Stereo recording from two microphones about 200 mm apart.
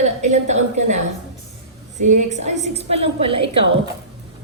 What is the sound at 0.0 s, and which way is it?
Speech, 35° right (ahead or behind).